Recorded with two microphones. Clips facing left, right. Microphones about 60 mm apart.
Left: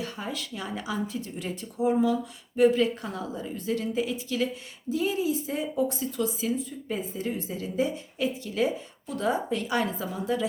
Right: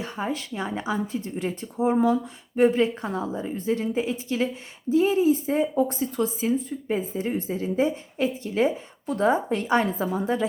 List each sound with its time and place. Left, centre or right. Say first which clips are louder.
0.0 s a woman's voice: right 5 dB; right